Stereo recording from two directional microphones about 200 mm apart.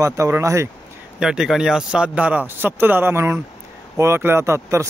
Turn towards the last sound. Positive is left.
turn(degrees=-15)  # may be behind; listen again after turning